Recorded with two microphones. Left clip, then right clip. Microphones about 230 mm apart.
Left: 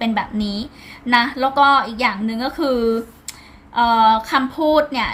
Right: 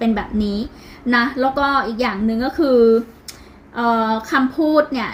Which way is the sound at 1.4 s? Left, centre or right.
Left.